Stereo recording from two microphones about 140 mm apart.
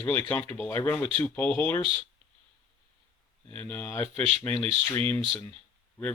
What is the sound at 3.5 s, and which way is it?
Speech, 10° left (ahead or behind).